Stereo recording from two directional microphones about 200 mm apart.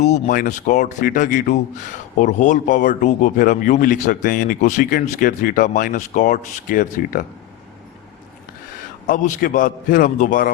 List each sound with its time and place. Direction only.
0.0 s speech: 40° left (ahead or behind)
9.0 s speech: 40° left (ahead or behind)